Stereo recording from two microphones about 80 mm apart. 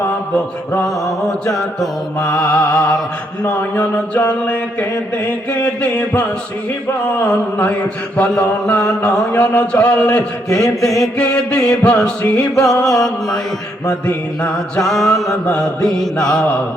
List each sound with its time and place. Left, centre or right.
1.0 s mantra: centre
3.4 s mantra: left
7.3 s mantra: centre
10.5 s mantra: centre
11.2 s mantra: centre
12.6 s mantra: centre
14.8 s mantra: centre